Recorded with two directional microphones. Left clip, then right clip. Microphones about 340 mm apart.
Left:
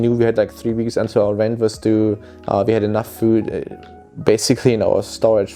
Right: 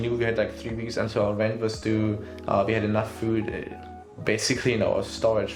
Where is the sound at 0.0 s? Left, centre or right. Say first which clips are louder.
Left 9 dB; left.